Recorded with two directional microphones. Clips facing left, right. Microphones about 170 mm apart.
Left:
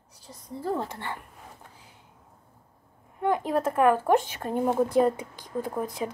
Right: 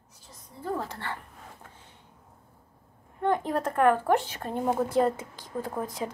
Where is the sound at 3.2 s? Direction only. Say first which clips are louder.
Left 2 dB; 10° left (ahead or behind).